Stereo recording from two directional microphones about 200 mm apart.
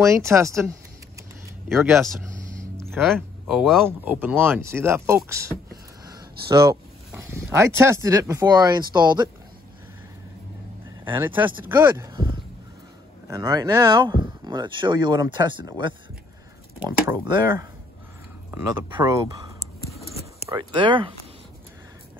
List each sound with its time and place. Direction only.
0.0 s speech: 15° right (ahead or behind)
1.7 s speech: centre (ahead or behind)
6.5 s speech: 15° right (ahead or behind)
11.1 s speech: 10° right (ahead or behind)
13.3 s speech: 15° right (ahead or behind)
16.8 s speech: 15° right (ahead or behind)
18.9 s speech: 20° right (ahead or behind)